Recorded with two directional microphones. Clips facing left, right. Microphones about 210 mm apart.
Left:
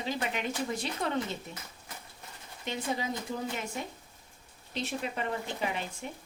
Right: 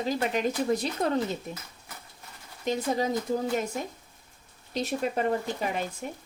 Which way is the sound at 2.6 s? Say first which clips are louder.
Right 7 dB; 40° right (ahead or behind).